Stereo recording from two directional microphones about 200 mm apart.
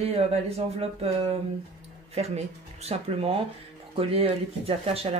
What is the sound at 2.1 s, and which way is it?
Speech, 30° right (ahead or behind).